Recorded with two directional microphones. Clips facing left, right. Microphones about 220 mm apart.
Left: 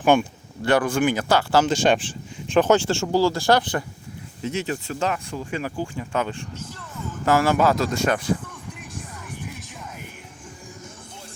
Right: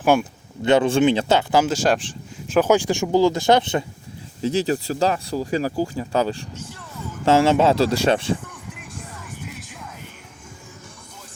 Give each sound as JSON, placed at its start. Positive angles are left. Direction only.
{"t": 0.0, "sound": "speech", "side_deg": -5}
{"t": 0.6, "sound": "speech", "side_deg": -20}
{"t": 1.6, "sound": "speech", "side_deg": 0}
{"t": 2.6, "sound": "speech", "side_deg": -10}
{"t": 4.4, "sound": "speech", "side_deg": -35}